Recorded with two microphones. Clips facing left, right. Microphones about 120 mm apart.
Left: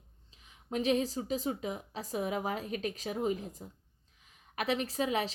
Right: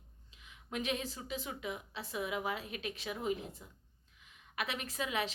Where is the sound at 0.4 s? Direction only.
35° left (ahead or behind).